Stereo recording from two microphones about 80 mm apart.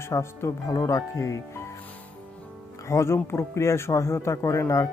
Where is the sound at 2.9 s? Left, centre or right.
Left.